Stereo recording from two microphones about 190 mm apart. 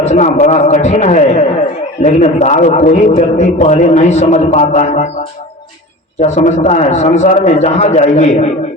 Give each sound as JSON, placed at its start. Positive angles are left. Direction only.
{"t": 0.0, "sound": "a man's voice", "side_deg": 40}
{"t": 6.1, "sound": "a man's voice", "side_deg": 40}